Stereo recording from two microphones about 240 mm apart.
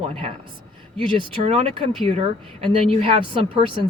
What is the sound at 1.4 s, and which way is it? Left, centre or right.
Speech, right.